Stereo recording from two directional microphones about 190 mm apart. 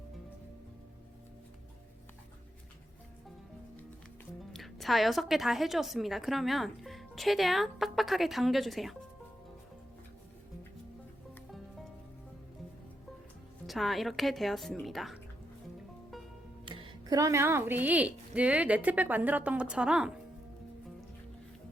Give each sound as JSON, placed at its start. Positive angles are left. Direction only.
{"t": 4.5, "sound": "a woman's voice", "side_deg": 0}
{"t": 13.7, "sound": "a woman's voice", "side_deg": 0}
{"t": 16.6, "sound": "speech", "side_deg": -20}